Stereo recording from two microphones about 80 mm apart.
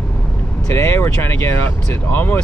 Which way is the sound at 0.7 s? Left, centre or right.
Left.